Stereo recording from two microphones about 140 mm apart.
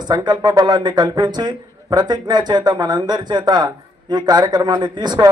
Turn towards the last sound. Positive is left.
turn(degrees=-30)  # may be behind; listen again after turning